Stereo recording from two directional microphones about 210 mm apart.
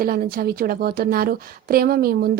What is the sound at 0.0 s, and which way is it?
A woman's voice, 45° right (ahead or behind).